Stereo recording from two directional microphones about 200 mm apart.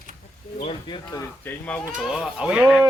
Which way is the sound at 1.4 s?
5° left (ahead or behind).